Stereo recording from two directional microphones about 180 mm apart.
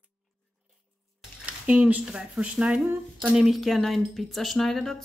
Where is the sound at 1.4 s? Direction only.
5° right (ahead or behind).